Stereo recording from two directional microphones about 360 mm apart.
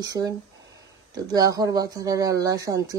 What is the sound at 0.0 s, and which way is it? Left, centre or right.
Speech, centre.